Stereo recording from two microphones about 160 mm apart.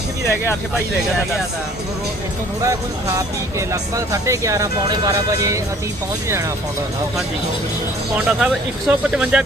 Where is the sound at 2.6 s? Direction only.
20° right (ahead or behind).